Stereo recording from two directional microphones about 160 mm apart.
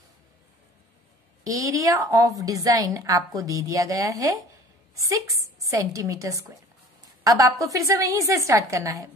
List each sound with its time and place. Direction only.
1.4 s a woman's voice: 20° right (ahead or behind)